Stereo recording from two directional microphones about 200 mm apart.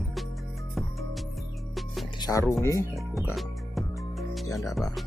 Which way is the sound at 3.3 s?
Centre (ahead or behind).